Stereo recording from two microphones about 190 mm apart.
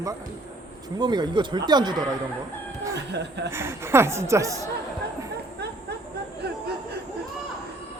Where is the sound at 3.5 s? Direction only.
15° right (ahead or behind).